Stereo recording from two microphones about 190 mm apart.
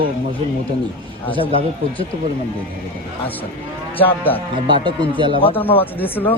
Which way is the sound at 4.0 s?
10° left (ahead or behind).